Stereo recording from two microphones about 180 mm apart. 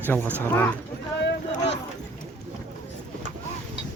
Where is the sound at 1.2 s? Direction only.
75° left (ahead or behind).